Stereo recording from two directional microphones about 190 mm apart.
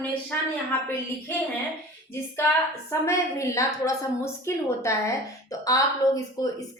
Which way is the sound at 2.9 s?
15° left (ahead or behind).